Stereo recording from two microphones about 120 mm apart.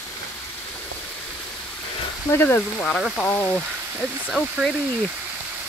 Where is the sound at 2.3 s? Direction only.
15° left (ahead or behind).